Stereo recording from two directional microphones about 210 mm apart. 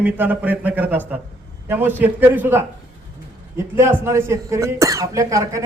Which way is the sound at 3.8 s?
10° right (ahead or behind).